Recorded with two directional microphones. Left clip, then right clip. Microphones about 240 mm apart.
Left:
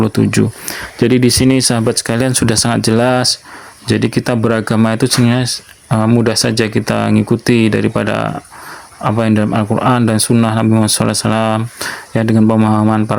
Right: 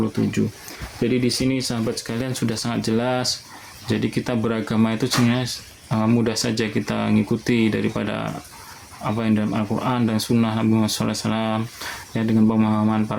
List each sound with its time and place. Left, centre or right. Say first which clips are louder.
0.0 s speech: left 9 dB; left